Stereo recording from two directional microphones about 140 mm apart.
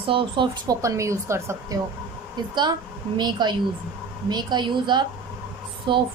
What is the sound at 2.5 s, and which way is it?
A woman's voice, 30° right (ahead or behind).